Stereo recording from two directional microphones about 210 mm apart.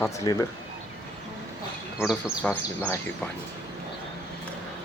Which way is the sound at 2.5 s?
10° left (ahead or behind).